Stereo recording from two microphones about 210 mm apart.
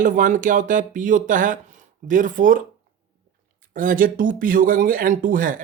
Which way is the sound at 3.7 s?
40° right (ahead or behind).